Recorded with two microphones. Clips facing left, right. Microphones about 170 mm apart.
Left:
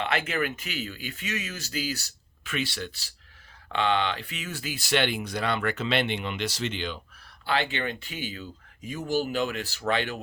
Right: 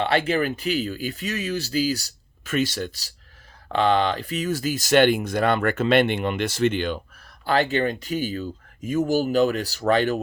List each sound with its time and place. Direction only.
0.0 s speech: 35° right (ahead or behind)